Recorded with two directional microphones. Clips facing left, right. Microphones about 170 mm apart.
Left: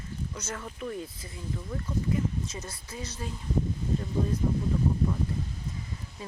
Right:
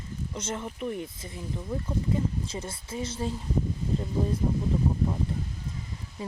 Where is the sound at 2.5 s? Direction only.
30° right (ahead or behind).